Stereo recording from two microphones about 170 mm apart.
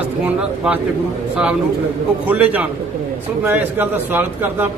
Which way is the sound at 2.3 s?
10° right (ahead or behind).